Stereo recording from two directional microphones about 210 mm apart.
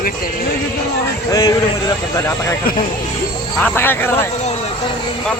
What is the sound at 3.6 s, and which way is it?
Speech, 10° left (ahead or behind).